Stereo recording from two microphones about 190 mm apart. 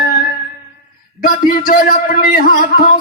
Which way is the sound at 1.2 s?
50° left (ahead or behind).